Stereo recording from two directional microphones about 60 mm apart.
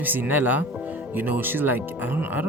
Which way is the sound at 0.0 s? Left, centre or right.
Right.